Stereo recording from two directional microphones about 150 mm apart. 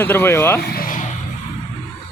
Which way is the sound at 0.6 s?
80° left.